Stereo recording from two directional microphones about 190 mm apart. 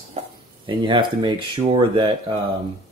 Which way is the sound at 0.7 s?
25° right (ahead or behind).